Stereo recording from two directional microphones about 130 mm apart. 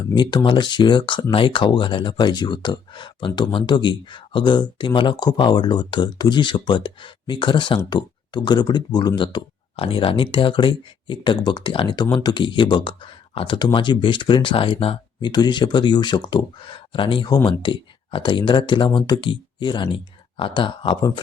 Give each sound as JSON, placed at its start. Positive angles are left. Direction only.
{"t": 0.0, "sound": "speech", "side_deg": 35}